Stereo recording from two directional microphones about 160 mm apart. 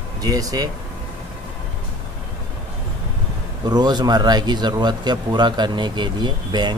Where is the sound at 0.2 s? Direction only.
20° right (ahead or behind).